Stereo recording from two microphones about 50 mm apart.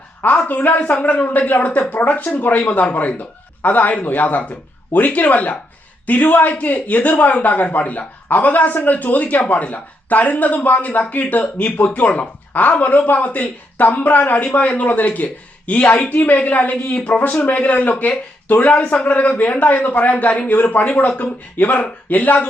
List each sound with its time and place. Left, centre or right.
0.4 s speech: left